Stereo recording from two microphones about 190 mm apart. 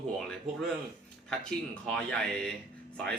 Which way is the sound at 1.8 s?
5° left (ahead or behind).